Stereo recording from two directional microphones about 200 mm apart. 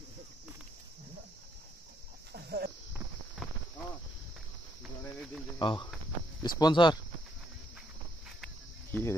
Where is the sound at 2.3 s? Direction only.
55° right (ahead or behind).